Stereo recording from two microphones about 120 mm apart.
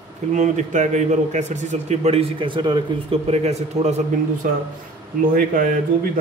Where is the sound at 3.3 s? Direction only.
65° right (ahead or behind).